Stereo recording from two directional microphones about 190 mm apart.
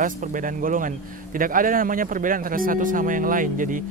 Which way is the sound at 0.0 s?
45° right (ahead or behind).